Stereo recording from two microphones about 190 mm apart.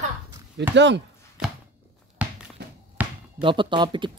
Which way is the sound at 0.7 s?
70° right (ahead or behind).